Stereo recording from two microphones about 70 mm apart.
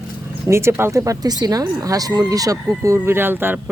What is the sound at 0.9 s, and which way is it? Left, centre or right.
Speech, right.